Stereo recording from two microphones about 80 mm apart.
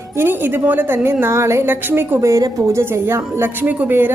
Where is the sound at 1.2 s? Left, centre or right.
Right.